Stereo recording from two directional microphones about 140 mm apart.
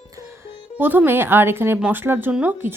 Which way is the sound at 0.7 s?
15° right (ahead or behind).